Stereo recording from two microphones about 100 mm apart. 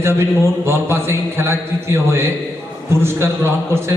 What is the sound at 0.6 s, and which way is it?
A man's voice, 25° right (ahead or behind).